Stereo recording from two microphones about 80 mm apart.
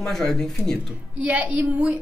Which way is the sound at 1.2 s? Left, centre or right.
Centre.